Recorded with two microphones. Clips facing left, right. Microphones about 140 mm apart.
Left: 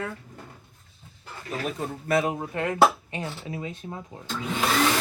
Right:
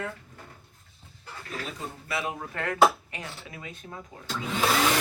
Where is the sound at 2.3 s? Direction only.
20° left (ahead or behind).